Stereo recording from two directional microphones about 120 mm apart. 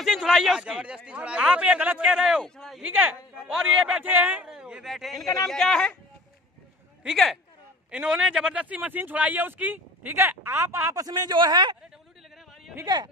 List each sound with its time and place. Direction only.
0.0 s speech: 5° right (ahead or behind)
2.8 s speech: 15° right (ahead or behind)
5.2 s speech: 30° left (ahead or behind)
5.5 s speech: 5° left (ahead or behind)
7.0 s speech: centre (ahead or behind); by 11.7 s 40° right (ahead or behind)
12.8 s speech: 35° right (ahead or behind)